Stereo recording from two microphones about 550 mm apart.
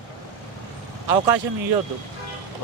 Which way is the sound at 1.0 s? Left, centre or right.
Right.